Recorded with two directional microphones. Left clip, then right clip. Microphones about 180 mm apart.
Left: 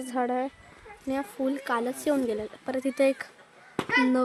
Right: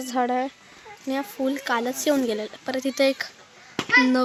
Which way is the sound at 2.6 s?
Centre (ahead or behind).